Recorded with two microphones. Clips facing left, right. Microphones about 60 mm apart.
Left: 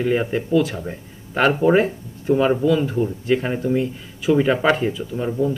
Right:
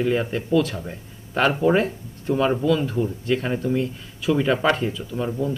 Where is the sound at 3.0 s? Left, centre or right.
Centre.